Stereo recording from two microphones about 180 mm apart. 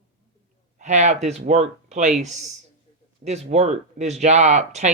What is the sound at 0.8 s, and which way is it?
Speech, 40° right (ahead or behind).